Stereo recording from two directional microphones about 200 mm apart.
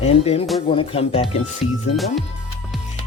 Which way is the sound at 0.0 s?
30° left (ahead or behind).